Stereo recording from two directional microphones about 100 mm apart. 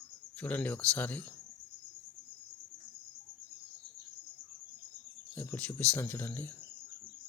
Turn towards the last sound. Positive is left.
turn(degrees=20)  # may be behind; listen again after turning